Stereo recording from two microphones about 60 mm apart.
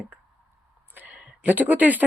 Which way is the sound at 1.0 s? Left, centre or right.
Right.